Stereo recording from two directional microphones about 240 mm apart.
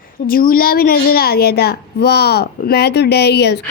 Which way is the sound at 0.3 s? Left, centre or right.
Left.